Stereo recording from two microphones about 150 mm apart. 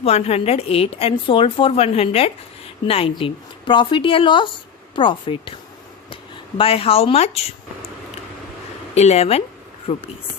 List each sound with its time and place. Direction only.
0.0 s a woman's voice: 45° left (ahead or behind)
6.6 s a woman's voice: 40° left (ahead or behind)
9.0 s speech: 45° left (ahead or behind)